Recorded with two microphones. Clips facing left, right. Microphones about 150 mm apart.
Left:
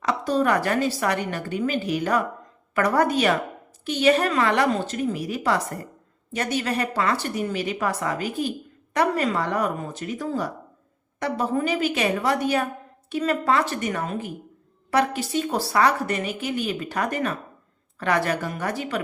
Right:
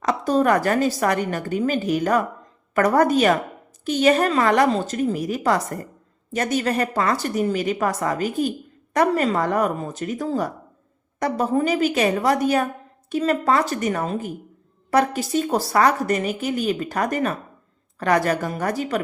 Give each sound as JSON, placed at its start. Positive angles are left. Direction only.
{"t": 0.0, "sound": "a woman's voice", "side_deg": -45}